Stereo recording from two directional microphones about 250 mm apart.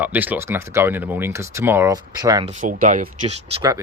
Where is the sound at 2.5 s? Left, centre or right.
Right.